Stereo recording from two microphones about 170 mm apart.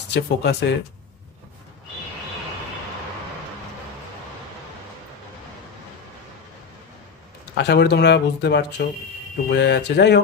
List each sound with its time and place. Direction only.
0.1 s speech: 85° left
7.5 s speech: 90° left